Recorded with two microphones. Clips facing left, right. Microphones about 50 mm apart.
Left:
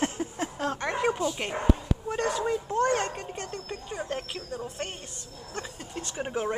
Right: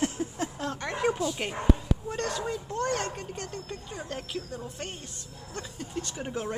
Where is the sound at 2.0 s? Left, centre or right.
Left.